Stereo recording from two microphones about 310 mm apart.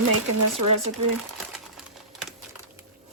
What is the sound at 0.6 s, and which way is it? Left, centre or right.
Speech, right.